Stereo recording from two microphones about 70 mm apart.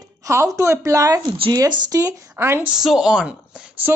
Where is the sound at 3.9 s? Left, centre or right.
Right.